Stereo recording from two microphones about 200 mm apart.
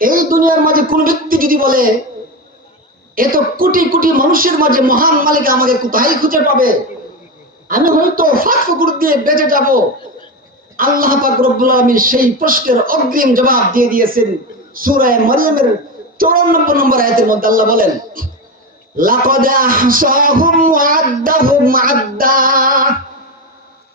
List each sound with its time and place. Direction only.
0.0 s a man's voice: 45° right (ahead or behind)
3.2 s a man's voice: 45° right (ahead or behind)